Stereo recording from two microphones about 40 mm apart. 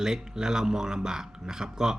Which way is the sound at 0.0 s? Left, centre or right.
Centre.